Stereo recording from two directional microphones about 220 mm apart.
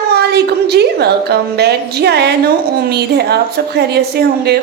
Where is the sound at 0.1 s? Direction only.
50° right (ahead or behind).